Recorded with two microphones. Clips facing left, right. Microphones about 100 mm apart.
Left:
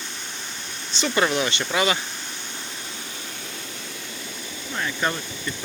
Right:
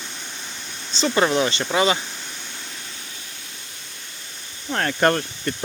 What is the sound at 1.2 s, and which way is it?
Speech, 30° right (ahead or behind).